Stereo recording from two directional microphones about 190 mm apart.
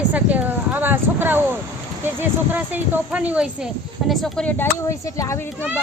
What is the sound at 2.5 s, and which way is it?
Speech, 10° right (ahead or behind).